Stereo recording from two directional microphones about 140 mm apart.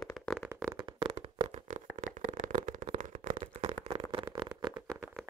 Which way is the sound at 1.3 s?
55° right (ahead or behind).